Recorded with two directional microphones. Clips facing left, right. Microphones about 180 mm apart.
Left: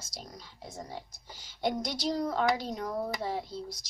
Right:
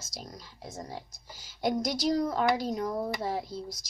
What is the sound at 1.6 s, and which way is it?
Child singing, 45° right (ahead or behind).